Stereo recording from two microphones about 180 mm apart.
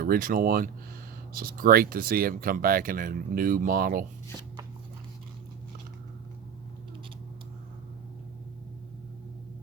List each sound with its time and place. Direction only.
0.0 s speech: 55° right (ahead or behind)